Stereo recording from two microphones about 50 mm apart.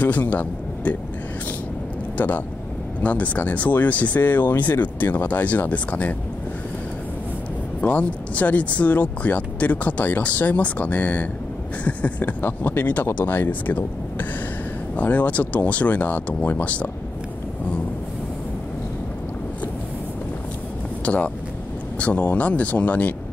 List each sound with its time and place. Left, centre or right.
0.0 s speech: left
2.1 s speech: left
7.8 s speech: left
15.0 s speech: left
21.0 s speech: left